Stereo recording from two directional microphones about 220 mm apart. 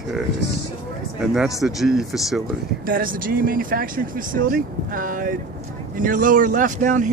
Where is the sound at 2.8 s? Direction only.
40° right (ahead or behind).